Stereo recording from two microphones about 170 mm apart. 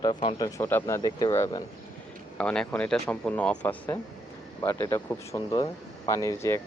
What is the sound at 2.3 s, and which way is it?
Speech, 5° left (ahead or behind).